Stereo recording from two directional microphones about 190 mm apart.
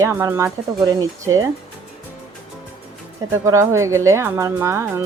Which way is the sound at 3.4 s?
15° right (ahead or behind).